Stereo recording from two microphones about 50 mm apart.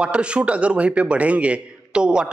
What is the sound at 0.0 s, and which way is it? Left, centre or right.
Speech, right.